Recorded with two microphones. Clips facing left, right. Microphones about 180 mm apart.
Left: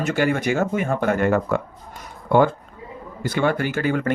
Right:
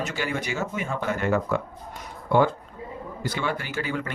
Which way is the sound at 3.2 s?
55° left (ahead or behind).